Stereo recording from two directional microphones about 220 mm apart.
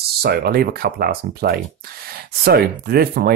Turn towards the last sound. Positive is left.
turn(degrees=-45)  # may be behind; listen again after turning